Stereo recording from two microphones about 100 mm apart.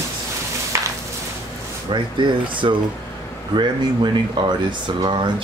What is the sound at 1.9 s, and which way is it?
Speech, 55° right (ahead or behind).